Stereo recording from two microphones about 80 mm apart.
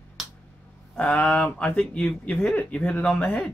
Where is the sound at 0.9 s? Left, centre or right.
Centre.